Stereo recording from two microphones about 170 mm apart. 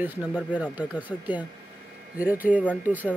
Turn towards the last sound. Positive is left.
turn(degrees=-10)  # may be behind; listen again after turning